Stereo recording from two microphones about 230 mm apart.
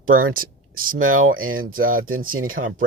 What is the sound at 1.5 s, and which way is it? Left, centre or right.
Speech, right.